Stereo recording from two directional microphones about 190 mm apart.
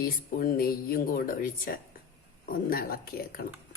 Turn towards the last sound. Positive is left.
turn(degrees=50)  # may be behind; listen again after turning